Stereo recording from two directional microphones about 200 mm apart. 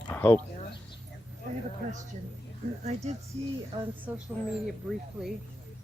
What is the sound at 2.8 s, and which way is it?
Speech, 35° right (ahead or behind).